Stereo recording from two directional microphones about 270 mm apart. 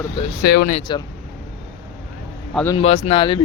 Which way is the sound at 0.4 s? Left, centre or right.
Left.